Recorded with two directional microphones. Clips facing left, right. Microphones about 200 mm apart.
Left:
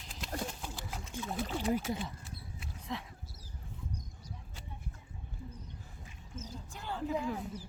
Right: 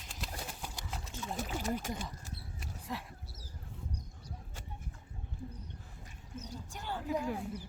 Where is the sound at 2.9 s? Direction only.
5° right (ahead or behind).